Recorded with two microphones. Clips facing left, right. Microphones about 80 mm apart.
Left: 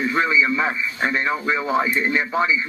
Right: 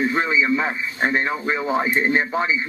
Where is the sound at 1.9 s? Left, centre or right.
Right.